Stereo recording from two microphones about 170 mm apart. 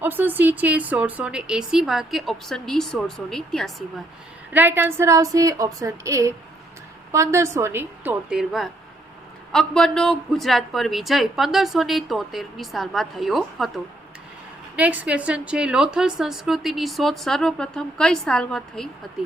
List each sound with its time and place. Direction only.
0.0 s a woman's voice: 10° right (ahead or behind)
4.5 s a woman's voice: 10° right (ahead or behind)
14.8 s a woman's voice: 10° right (ahead or behind)